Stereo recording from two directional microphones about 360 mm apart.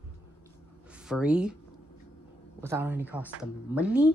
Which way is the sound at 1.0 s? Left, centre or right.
Centre.